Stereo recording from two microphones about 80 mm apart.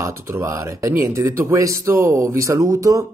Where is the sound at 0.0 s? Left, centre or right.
Right.